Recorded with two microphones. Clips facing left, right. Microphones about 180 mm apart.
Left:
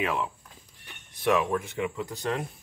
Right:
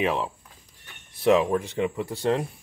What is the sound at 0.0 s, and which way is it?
Speech, 25° right (ahead or behind).